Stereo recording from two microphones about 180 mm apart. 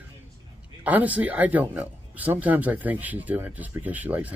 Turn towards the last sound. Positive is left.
turn(degrees=-10)  # may be behind; listen again after turning